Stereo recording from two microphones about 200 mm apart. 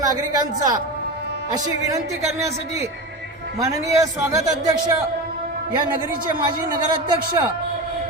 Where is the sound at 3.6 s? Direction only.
15° right (ahead or behind).